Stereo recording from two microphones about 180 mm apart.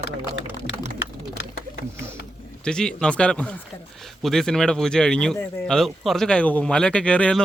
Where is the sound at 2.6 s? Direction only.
5° left (ahead or behind).